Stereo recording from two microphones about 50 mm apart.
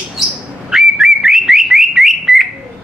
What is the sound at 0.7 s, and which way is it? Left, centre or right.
Whistling, centre.